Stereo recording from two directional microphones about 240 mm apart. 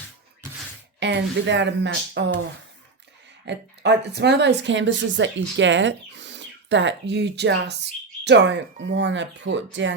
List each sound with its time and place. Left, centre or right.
0.9 s speech: right
3.4 s speech: right